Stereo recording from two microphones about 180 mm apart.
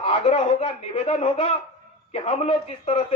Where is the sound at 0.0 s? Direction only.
30° left (ahead or behind).